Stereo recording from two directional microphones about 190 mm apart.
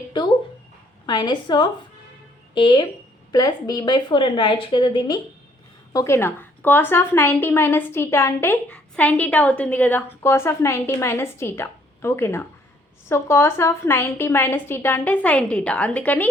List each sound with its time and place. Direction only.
0.1 s a woman's voice: 25° left (ahead or behind); by 16.3 s 10° left (ahead or behind)